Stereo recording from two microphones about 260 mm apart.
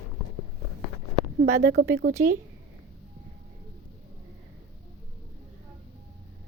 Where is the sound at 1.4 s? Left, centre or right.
Right.